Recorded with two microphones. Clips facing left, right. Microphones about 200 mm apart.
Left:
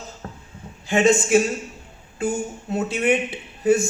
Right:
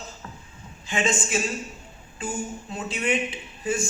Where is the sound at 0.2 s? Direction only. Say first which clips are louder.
Left 5 dB; 55° left (ahead or behind).